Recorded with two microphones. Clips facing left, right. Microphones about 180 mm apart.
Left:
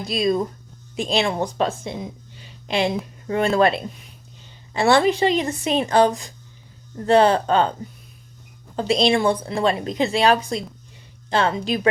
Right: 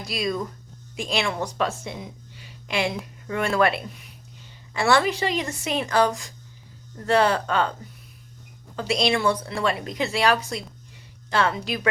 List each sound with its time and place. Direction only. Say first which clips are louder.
0.1 s a woman's voice: left 6 dB; 25° left (ahead or behind)